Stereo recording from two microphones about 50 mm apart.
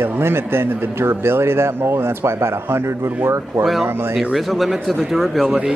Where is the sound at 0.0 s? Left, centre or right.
Right.